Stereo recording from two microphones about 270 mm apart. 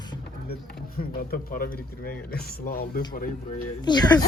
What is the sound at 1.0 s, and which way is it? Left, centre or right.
Speech, left.